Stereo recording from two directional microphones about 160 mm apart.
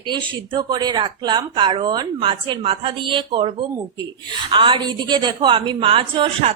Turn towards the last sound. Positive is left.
turn(degrees=-35)  # may be behind; listen again after turning